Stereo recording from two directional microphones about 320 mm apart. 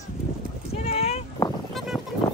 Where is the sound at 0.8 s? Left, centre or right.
Centre.